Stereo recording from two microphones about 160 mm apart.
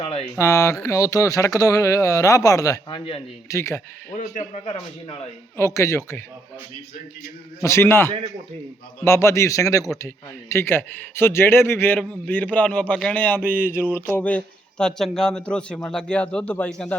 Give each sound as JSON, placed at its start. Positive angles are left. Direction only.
{"t": 0.0, "sound": "speech", "side_deg": 40}
{"t": 0.3, "sound": "speech", "side_deg": 20}
{"t": 4.1, "sound": "a man's voice", "side_deg": 50}
{"t": 5.5, "sound": "a man's voice", "side_deg": 15}
{"t": 7.6, "sound": "a man's voice", "side_deg": 15}
{"t": 13.7, "sound": "a sound", "side_deg": -10}
{"t": 14.1, "sound": "a man's voice", "side_deg": 10}